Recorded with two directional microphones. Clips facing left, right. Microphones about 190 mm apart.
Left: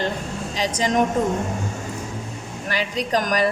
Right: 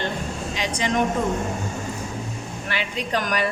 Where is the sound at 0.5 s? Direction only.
35° left (ahead or behind).